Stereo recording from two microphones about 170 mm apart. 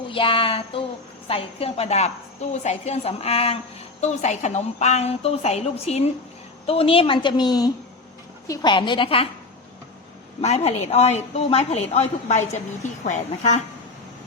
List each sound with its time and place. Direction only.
0.1 s a woman's voice: 30° left (ahead or behind)
10.4 s a woman's voice: 35° left (ahead or behind)